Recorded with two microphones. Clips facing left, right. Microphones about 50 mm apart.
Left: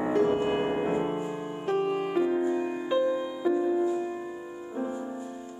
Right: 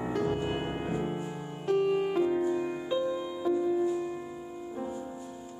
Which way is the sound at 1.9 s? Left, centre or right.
Centre.